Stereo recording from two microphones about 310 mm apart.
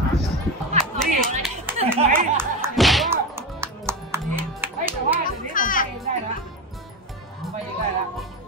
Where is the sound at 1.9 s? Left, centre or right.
Right.